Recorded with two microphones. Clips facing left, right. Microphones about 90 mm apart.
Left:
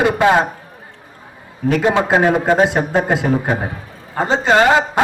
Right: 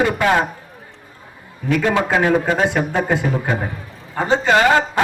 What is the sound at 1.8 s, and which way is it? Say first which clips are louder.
A man's voice: left 3 dB; 25° left (ahead or behind).